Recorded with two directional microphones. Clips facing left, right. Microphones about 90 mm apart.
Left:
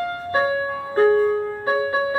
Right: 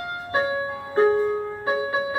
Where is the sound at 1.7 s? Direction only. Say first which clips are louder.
Left 3 dB; 35° left (ahead or behind).